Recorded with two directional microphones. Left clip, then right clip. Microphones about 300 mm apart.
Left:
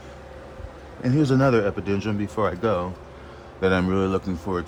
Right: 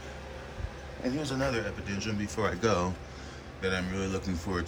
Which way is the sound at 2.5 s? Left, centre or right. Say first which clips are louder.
Left 2 dB; centre.